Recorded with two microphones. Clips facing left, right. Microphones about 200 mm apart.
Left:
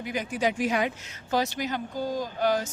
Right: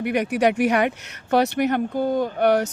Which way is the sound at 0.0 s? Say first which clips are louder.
Right 8 dB; 70° right (ahead or behind).